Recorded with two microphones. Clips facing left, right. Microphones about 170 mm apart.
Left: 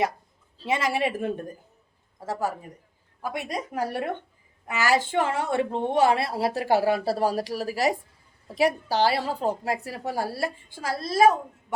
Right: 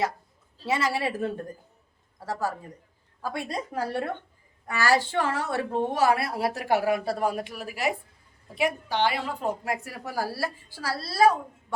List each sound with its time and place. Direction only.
0.6 s a woman's voice: 20° left (ahead or behind)